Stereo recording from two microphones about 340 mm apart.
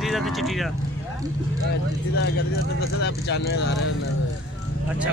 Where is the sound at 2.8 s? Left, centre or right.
Left.